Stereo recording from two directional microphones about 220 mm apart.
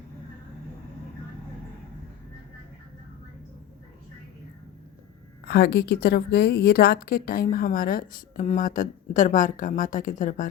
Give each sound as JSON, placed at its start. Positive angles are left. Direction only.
{"t": 5.5, "sound": "a woman's voice", "side_deg": 50}